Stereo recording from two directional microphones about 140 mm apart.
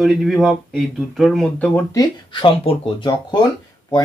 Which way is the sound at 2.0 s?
40° left (ahead or behind).